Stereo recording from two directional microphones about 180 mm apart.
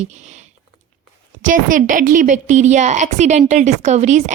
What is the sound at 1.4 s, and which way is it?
Speech, 50° right (ahead or behind).